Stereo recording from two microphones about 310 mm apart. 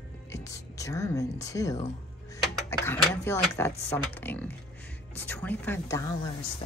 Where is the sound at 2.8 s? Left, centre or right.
Centre.